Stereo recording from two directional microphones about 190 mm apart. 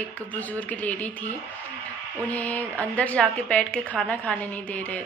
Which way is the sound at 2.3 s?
10° left (ahead or behind).